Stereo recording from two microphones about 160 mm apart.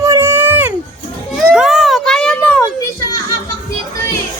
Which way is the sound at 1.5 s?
Centre (ahead or behind).